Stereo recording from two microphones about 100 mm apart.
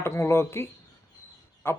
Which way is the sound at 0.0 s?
25° left (ahead or behind).